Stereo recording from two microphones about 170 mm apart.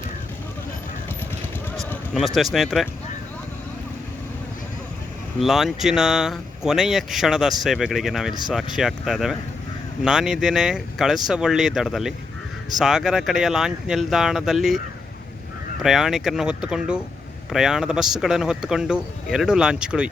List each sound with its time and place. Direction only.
2.1 s speech: centre (ahead or behind)
5.4 s speech: centre (ahead or behind)
15.8 s speech: centre (ahead or behind)